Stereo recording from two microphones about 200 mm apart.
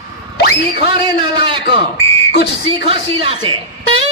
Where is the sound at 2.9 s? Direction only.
25° right (ahead or behind).